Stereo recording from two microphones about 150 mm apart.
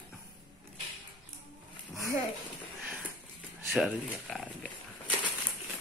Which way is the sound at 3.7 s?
Centre (ahead or behind).